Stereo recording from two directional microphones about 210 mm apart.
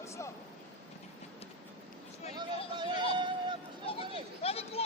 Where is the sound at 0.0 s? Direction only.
15° left (ahead or behind).